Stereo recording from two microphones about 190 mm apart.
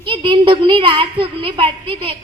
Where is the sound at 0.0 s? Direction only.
25° right (ahead or behind).